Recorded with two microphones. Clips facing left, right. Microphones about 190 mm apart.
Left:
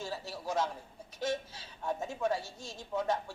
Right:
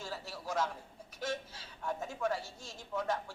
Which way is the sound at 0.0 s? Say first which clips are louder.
Left 3 dB; 20° left (ahead or behind).